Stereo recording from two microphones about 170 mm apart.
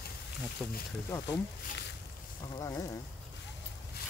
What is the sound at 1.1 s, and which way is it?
Speech, 10° left (ahead or behind).